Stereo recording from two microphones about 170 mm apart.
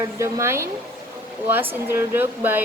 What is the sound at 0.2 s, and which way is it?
Speech, 15° right (ahead or behind).